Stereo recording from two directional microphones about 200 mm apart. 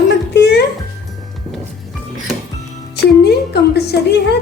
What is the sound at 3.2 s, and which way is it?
A woman's voice, 55° left (ahead or behind).